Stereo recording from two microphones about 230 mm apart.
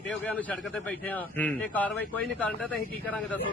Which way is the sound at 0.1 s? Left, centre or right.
Centre.